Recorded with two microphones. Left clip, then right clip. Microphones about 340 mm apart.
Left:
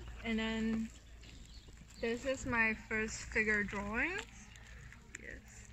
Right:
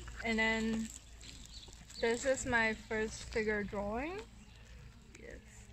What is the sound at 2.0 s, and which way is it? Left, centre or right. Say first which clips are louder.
Speech: right 4 dB; right.